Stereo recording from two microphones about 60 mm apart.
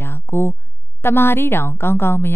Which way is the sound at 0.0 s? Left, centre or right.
Left.